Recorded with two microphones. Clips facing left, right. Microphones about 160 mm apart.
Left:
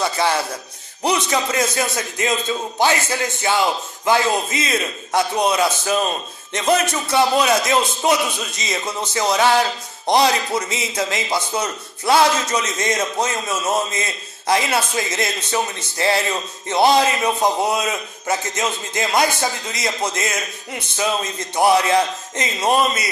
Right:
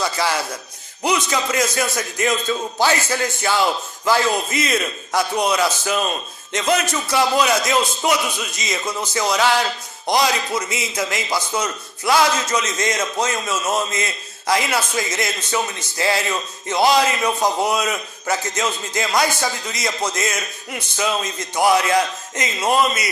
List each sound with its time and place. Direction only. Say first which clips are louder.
0.0 s a man's voice: left 2 dB; 25° left (ahead or behind)